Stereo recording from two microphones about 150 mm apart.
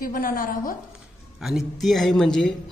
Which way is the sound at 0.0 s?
70° left (ahead or behind).